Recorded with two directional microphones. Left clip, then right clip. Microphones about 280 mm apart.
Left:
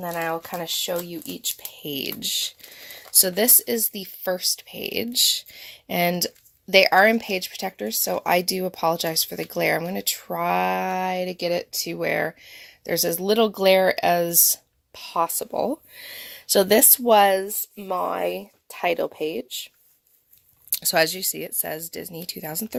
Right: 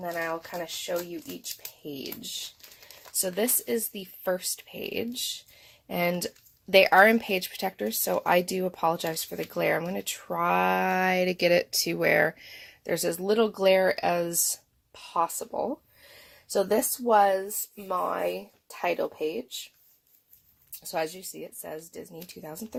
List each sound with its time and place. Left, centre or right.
0.0 s speech: left
3.2 s speech: left
20.9 s speech: left